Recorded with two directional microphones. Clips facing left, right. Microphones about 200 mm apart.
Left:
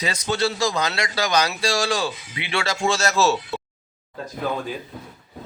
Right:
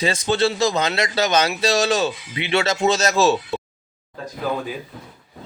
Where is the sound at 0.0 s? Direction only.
25° right (ahead or behind).